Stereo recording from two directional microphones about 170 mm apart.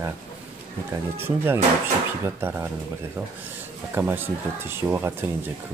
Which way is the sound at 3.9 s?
10° right (ahead or behind).